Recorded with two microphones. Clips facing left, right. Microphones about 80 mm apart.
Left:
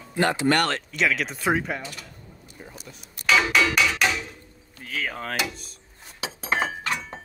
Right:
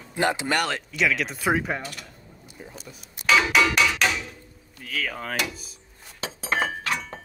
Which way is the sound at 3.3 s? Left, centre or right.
Centre.